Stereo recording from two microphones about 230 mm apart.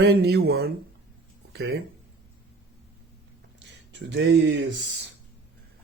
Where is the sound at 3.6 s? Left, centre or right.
Right.